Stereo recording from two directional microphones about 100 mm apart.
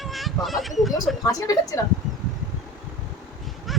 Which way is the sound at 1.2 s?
35° left (ahead or behind).